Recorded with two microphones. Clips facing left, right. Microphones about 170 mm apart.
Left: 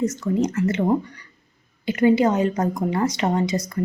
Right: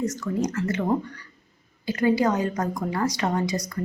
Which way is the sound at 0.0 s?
25° left (ahead or behind).